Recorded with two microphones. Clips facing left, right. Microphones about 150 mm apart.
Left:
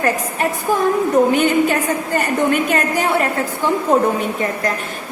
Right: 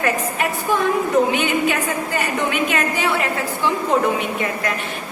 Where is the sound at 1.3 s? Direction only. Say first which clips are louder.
Left 4 dB; 45° left (ahead or behind).